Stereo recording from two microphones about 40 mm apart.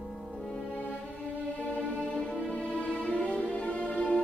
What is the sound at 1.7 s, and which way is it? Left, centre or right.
Music, left.